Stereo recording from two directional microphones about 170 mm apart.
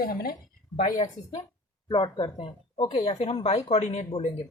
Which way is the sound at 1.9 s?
30° left (ahead or behind).